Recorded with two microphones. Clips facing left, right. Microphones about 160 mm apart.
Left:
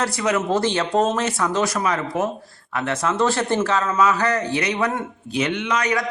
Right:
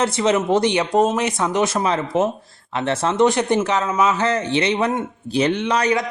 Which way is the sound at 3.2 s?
15° right (ahead or behind).